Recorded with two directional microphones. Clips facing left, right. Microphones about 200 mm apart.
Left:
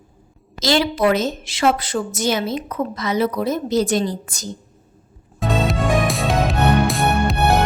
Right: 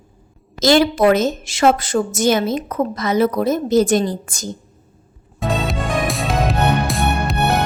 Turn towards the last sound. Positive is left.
turn(degrees=0)  # may be behind; listen again after turning